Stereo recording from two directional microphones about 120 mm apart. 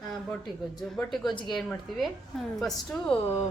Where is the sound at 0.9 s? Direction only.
Centre (ahead or behind).